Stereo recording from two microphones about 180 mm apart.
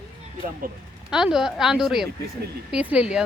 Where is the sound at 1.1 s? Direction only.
5° right (ahead or behind).